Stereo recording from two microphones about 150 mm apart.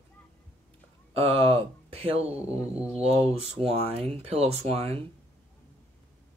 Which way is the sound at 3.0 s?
40° right (ahead or behind).